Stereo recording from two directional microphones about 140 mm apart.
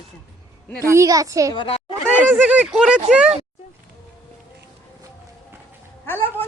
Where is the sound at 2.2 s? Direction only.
10° right (ahead or behind).